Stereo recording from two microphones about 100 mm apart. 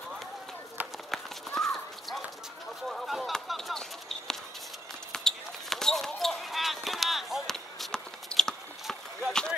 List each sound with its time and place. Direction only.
1.1 s horse: 5° left (ahead or behind)
2.9 s a sound: centre (ahead or behind)
5.1 s basketball bounce: 5° left (ahead or behind)